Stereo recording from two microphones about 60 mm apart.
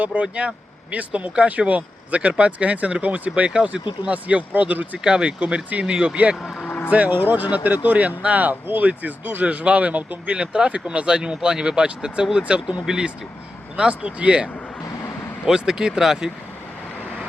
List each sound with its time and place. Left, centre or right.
0.0 s speech: right
5.0 s speech: centre
6.4 s speech: centre
6.7 s vehicle: left
6.9 s speech: right; by 16.3 s centre